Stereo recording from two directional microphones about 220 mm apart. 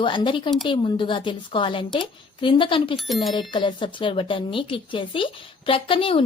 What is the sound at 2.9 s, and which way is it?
Speech, centre (ahead or behind).